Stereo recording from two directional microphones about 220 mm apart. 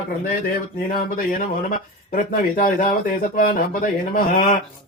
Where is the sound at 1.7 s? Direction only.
35° left (ahead or behind).